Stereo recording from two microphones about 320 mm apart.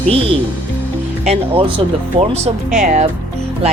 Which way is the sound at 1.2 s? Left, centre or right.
Centre.